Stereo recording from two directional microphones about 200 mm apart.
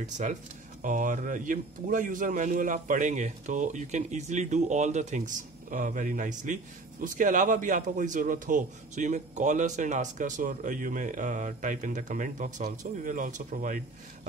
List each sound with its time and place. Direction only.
0.0 s a man's voice: 40° right (ahead or behind)